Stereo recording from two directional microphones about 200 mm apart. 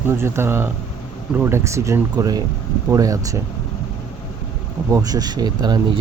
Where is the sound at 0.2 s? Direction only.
10° right (ahead or behind).